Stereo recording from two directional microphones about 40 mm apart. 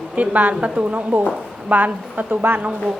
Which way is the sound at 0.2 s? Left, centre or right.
Right.